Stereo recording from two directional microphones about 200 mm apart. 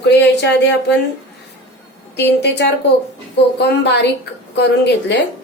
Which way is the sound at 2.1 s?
60° left (ahead or behind).